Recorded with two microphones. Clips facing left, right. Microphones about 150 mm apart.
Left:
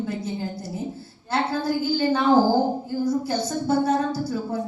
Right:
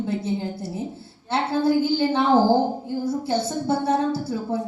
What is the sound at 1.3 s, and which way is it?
A woman's voice, 25° right (ahead or behind).